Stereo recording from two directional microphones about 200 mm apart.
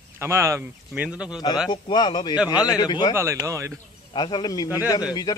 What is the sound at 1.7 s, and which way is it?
Speech, 20° left (ahead or behind).